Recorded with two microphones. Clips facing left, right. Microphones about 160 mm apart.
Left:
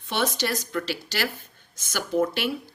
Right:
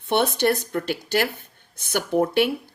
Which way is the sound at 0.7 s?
50° right (ahead or behind).